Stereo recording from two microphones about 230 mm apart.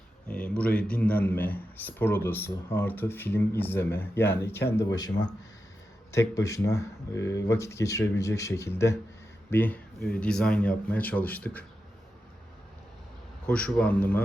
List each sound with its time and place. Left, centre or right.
0.3 s a man's voice: centre
13.5 s a man's voice: centre